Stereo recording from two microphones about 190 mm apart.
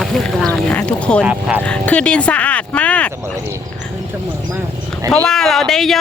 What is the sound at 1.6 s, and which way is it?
Speech, 5° left (ahead or behind).